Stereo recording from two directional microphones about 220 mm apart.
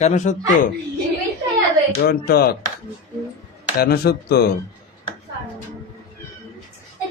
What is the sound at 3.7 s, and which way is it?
Speech, 45° left (ahead or behind).